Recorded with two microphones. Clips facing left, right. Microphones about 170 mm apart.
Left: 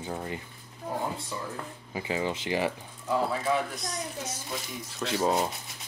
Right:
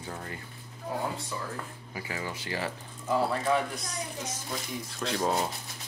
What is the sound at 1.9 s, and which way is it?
Speech, 20° left (ahead or behind).